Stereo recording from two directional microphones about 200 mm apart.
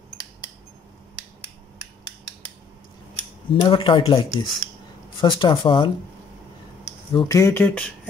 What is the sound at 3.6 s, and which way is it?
Speech, 25° left (ahead or behind).